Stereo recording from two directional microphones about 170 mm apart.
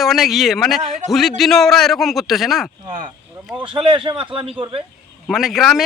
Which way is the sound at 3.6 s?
30° right (ahead or behind).